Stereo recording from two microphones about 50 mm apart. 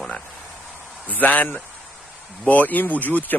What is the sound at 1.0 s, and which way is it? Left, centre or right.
A man's voice, left.